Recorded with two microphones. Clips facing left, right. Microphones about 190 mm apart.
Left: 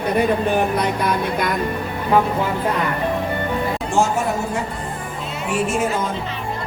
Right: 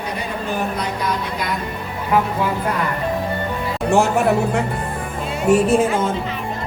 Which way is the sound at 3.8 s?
65° right (ahead or behind).